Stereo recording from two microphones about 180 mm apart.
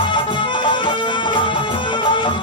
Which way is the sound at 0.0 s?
25° left (ahead or behind).